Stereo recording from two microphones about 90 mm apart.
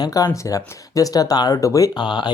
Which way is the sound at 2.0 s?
60° left (ahead or behind).